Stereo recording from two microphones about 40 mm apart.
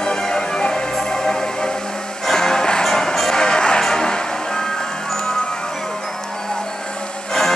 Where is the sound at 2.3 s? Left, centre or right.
Centre.